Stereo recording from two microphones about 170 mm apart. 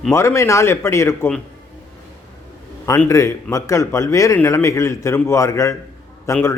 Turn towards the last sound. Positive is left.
turn(degrees=15)  # may be behind; listen again after turning